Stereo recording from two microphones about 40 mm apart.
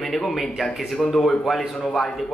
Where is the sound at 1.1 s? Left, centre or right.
Centre.